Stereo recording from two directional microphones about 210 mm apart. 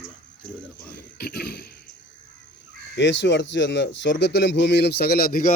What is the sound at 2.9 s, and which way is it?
Speech, 60° left (ahead or behind).